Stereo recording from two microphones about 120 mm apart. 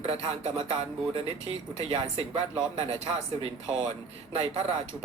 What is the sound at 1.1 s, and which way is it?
Speech, 55° right (ahead or behind).